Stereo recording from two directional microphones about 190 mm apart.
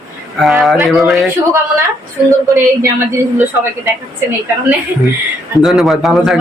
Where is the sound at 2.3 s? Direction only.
15° right (ahead or behind).